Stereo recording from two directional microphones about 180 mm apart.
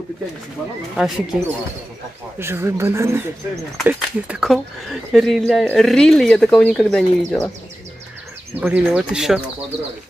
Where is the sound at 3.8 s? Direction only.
5° right (ahead or behind).